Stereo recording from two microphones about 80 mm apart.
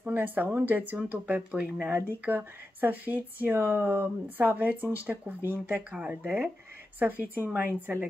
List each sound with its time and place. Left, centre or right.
0.0 s speech: right
5.7 s speech: centre